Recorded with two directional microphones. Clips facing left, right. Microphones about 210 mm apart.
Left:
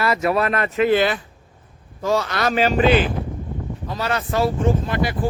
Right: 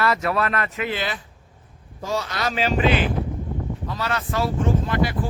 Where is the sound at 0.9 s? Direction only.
60° left (ahead or behind).